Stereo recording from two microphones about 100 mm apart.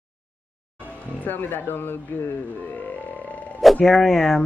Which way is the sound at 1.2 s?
20° left (ahead or behind).